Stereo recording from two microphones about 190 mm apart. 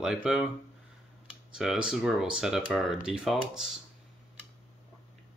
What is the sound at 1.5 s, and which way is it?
Speech, 5° right (ahead or behind).